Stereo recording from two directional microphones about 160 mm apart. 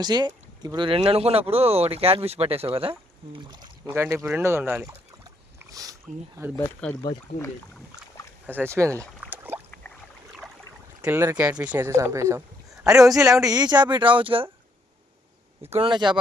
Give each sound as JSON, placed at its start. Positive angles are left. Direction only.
{"t": 0.0, "sound": "speech", "side_deg": -25}
{"t": 3.8, "sound": "speech", "side_deg": -15}
{"t": 4.8, "sound": "rowboat", "side_deg": -15}
{"t": 7.0, "sound": "speech", "side_deg": 20}
{"t": 8.6, "sound": "boat", "side_deg": -15}
{"t": 11.0, "sound": "speech", "side_deg": -15}
{"t": 15.7, "sound": "speech", "side_deg": -30}